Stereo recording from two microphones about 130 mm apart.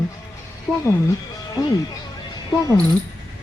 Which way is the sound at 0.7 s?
10° right (ahead or behind).